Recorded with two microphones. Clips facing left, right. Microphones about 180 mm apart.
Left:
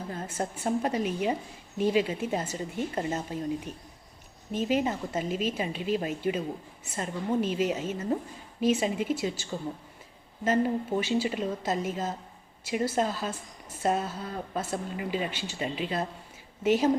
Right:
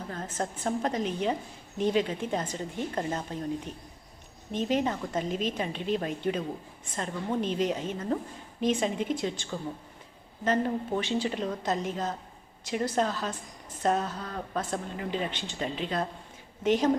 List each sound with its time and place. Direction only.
0.1 s a woman's voice: 10° left (ahead or behind)